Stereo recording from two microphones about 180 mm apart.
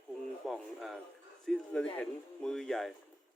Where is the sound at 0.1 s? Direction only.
Centre (ahead or behind).